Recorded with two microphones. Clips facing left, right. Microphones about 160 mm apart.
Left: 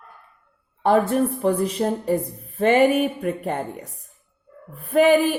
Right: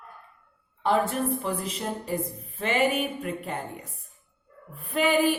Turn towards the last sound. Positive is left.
turn(degrees=45)  # may be behind; listen again after turning